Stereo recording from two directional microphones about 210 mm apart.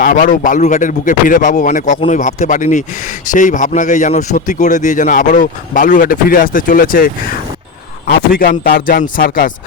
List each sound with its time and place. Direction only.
0.0 s speech: 40° left (ahead or behind)